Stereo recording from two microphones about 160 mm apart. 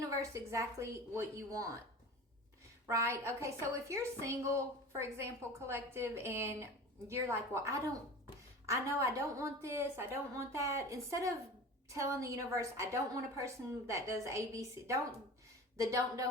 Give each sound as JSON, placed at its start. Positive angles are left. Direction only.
{"t": 0.0, "sound": "speech", "side_deg": -20}
{"t": 2.8, "sound": "a woman's voice", "side_deg": -15}